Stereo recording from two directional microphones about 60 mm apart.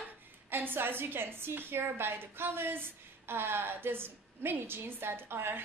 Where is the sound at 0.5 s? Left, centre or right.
Right.